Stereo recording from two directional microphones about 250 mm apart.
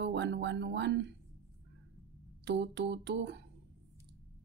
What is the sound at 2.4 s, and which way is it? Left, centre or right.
Speech, right.